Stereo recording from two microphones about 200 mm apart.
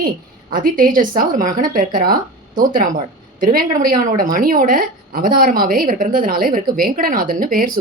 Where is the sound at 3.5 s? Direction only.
45° right (ahead or behind).